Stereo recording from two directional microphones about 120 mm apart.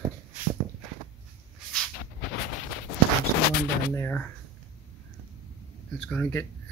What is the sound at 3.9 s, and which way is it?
Speech, 15° left (ahead or behind).